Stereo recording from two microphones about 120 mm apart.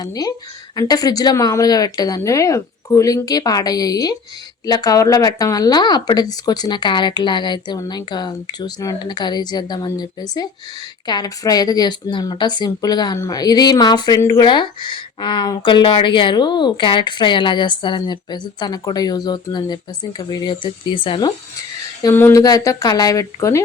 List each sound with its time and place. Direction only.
0.0 s speech: 30° left (ahead or behind)
14.4 s speech: 40° left (ahead or behind)
22.1 s speech: 20° left (ahead or behind)
22.4 s speech: 30° left (ahead or behind)